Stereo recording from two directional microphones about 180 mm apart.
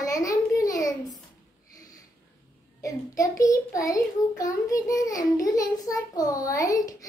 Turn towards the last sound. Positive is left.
turn(degrees=20)  # may be behind; listen again after turning